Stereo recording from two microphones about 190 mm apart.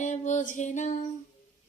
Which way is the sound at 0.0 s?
40° left (ahead or behind).